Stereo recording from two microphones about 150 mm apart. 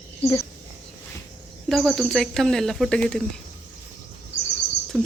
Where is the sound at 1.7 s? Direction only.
Centre (ahead or behind).